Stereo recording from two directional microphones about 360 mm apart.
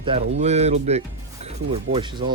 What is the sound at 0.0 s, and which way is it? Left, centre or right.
Speech, centre.